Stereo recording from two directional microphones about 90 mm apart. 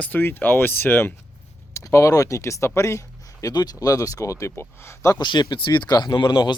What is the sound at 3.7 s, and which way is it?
Speech, 35° left (ahead or behind).